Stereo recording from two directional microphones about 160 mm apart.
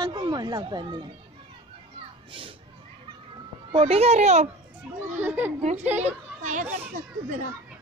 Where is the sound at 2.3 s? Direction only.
35° right (ahead or behind).